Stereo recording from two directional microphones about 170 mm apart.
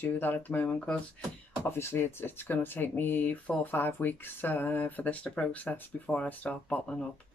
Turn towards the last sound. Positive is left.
turn(degrees=10)  # may be behind; listen again after turning